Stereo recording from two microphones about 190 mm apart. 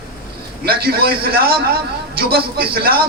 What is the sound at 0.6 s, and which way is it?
A man's voice, 55° right (ahead or behind).